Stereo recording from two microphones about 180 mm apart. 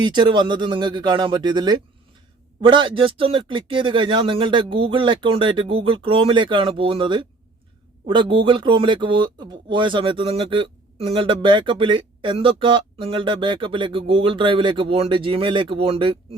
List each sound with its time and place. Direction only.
0.0 s speech: 25° right (ahead or behind)